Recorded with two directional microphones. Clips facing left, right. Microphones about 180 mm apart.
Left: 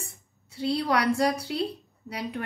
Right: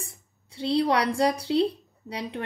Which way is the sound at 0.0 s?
30° right (ahead or behind).